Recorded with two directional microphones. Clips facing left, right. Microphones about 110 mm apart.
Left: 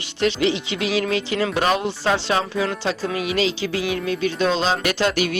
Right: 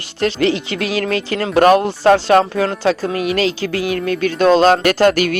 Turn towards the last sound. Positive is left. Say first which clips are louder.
# right 7 dB
turn(degrees=-50)  # may be behind; listen again after turning